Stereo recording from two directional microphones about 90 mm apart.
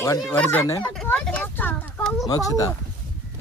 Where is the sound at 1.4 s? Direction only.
20° left (ahead or behind).